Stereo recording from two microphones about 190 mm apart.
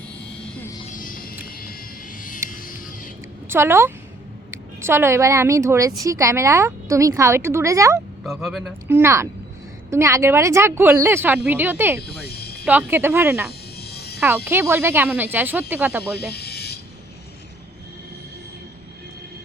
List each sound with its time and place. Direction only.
0.9 s music: 45° left (ahead or behind)
1.5 s vehicle: 50° left (ahead or behind)
2.5 s a sound: 45° left (ahead or behind)
3.5 s a woman's voice: 15° right (ahead or behind)
8.2 s speech: centre (ahead or behind)
8.9 s a woman's voice: 15° right (ahead or behind)
12.2 s a sound: 55° left (ahead or behind)
12.6 s a woman's voice: 10° right (ahead or behind)
13.5 s music: 55° left (ahead or behind)
14.2 s a woman's voice: 10° right (ahead or behind)
16.1 s snake: 55° left (ahead or behind)